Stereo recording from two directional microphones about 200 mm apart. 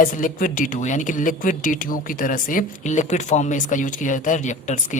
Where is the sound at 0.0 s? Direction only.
45° left (ahead or behind).